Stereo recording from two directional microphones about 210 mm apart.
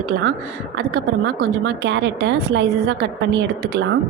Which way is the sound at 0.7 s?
75° right (ahead or behind).